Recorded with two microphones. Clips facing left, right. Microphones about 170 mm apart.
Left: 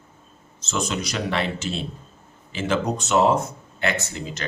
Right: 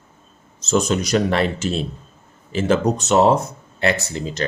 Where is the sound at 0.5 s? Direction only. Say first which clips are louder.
Right 9 dB; 40° right (ahead or behind).